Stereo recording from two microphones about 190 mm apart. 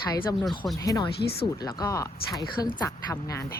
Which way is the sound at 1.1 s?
55° left (ahead or behind).